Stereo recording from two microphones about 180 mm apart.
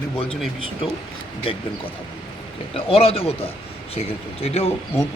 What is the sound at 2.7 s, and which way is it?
A man's voice, 30° left (ahead or behind).